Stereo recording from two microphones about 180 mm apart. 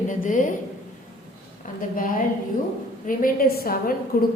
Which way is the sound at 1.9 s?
50° left (ahead or behind).